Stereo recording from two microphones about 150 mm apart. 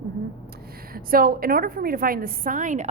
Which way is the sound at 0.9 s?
75° right (ahead or behind).